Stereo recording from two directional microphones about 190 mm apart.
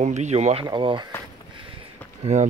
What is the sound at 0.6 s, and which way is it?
Speech, 25° right (ahead or behind).